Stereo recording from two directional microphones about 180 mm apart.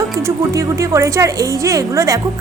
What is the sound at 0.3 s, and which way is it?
A woman's voice, 15° right (ahead or behind).